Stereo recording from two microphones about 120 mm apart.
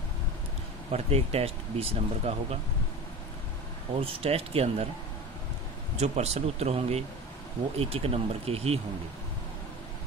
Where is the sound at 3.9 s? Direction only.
50° right (ahead or behind).